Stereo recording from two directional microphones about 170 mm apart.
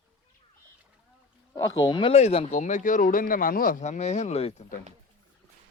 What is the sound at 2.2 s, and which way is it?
Speech, 40° left (ahead or behind).